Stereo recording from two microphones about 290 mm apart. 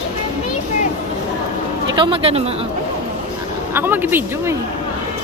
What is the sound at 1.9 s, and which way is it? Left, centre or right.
Speech, centre.